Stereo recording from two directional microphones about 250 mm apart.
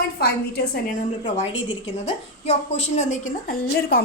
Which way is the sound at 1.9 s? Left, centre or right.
Left.